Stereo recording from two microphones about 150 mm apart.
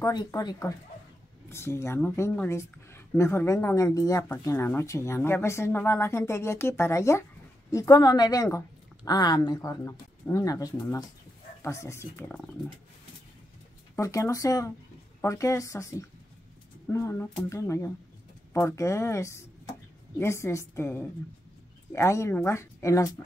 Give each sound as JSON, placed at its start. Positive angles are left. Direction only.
{"t": 0.0, "sound": "a woman's voice", "side_deg": 25}
{"t": 13.9, "sound": "a woman's voice", "side_deg": 20}